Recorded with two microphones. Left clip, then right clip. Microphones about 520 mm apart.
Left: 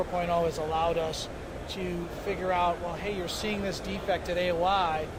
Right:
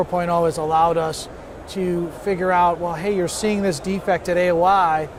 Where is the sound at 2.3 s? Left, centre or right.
Right.